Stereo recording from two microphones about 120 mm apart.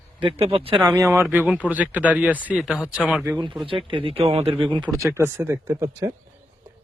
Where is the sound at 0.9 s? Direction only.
25° right (ahead or behind); by 3.2 s 10° right (ahead or behind).